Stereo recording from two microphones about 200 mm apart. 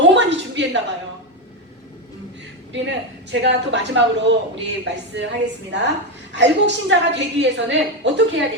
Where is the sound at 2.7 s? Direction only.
65° right (ahead or behind).